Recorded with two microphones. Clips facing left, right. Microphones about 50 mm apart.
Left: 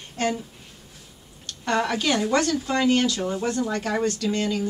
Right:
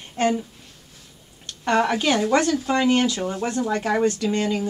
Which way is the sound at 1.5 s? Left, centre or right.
Centre.